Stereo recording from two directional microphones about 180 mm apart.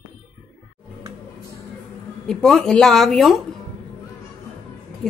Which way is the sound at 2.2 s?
5° left (ahead or behind).